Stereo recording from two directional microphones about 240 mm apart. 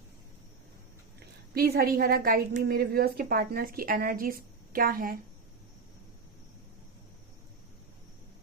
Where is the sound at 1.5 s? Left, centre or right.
Right.